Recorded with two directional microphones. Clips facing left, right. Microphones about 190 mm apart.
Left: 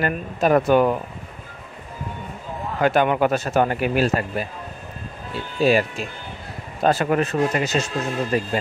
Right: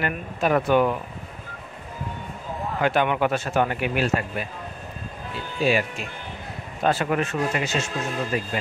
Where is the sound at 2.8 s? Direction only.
40° left (ahead or behind).